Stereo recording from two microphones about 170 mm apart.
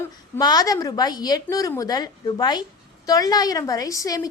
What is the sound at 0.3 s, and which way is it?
A woman's voice, 20° left (ahead or behind).